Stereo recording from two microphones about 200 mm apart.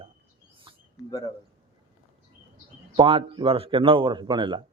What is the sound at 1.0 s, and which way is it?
Speech, 20° left (ahead or behind).